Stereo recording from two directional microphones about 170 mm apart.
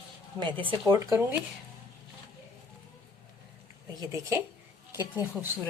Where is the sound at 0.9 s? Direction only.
20° right (ahead or behind).